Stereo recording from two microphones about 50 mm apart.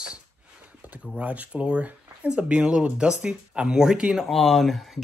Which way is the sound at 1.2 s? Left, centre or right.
Right.